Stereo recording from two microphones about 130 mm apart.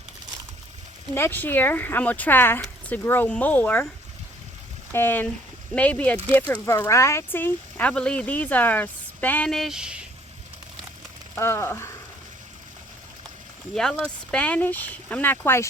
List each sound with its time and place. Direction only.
1.1 s speech: 15° left (ahead or behind)
4.9 s speech: 15° left (ahead or behind); by 10.1 s 5° right (ahead or behind)
11.3 s speech: 20° left (ahead or behind)
13.7 s speech: 5° left (ahead or behind)